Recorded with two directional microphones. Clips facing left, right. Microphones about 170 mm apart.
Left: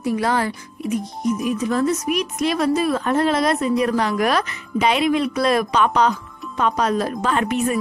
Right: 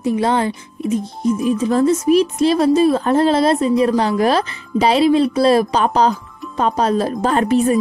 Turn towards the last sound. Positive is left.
turn(degrees=-30)  # may be behind; listen again after turning